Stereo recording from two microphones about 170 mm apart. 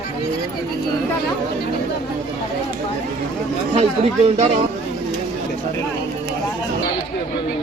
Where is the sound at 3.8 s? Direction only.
35° right (ahead or behind).